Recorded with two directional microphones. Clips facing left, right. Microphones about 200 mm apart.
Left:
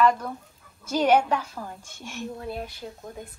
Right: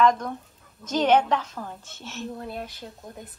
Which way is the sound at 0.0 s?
5° left (ahead or behind).